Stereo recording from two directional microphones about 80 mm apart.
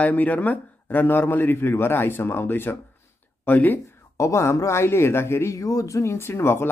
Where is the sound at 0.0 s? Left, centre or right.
Centre.